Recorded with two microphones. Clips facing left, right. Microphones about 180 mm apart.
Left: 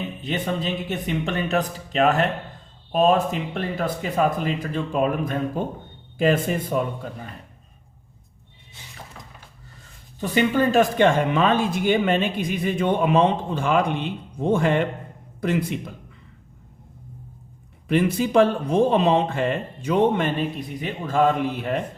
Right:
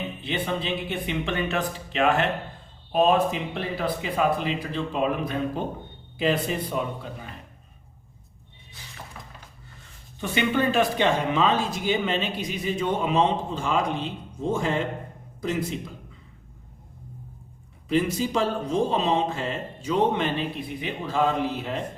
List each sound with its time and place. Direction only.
0.2 s speech: 45° left (ahead or behind)
10.2 s speech: 40° left (ahead or behind); by 15.8 s 60° left (ahead or behind)
17.8 s speech: 60° left (ahead or behind)